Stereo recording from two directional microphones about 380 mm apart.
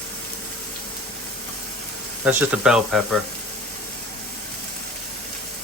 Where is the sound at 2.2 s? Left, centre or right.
Centre.